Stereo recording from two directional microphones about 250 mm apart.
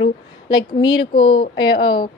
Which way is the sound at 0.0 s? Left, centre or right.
Centre.